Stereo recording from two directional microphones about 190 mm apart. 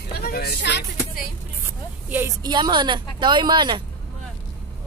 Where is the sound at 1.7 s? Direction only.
10° right (ahead or behind).